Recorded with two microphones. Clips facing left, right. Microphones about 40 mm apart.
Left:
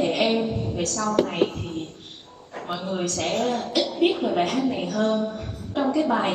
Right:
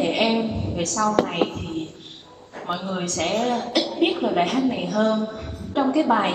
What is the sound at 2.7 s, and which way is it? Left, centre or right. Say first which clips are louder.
Speech: right 3 dB; centre.